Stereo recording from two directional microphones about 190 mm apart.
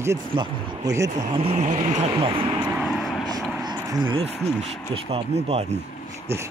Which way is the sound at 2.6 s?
5° right (ahead or behind).